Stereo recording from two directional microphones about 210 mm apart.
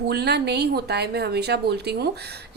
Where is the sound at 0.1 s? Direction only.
50° right (ahead or behind).